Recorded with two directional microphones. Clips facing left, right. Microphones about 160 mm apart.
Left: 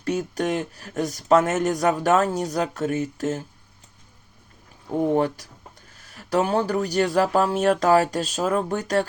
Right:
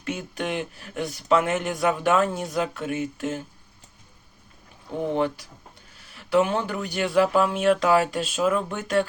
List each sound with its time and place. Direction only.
0.0 s speech: 40° left (ahead or behind)
5.1 s speech: 45° left (ahead or behind)